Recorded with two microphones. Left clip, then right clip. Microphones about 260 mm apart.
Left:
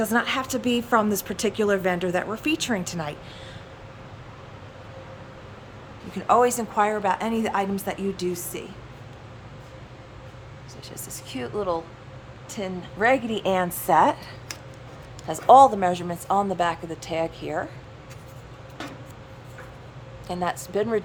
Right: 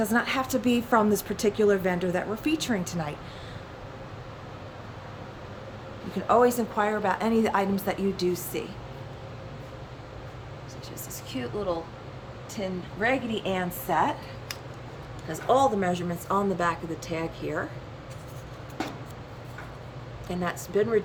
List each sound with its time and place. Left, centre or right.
0.0 s a woman's voice: centre
6.1 s a woman's voice: centre
11.3 s a woman's voice: centre
20.2 s a woman's voice: centre